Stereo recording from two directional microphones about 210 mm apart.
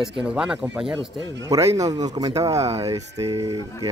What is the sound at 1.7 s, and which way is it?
Speech, 15° right (ahead or behind).